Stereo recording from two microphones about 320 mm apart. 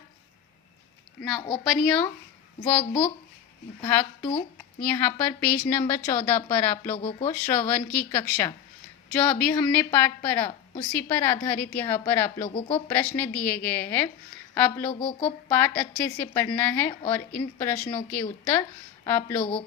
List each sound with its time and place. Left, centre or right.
1.4 s speech: centre
1.6 s speech: centre
3.8 s a woman's voice: centre
4.8 s speech: centre
6.9 s speech: centre
7.3 s speech: centre
12.5 s speech: centre
12.9 s speech: centre
14.8 s speech: centre
15.4 s speech: centre
19.4 s speech: centre